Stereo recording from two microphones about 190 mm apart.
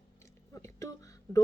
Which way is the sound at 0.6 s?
15° left (ahead or behind).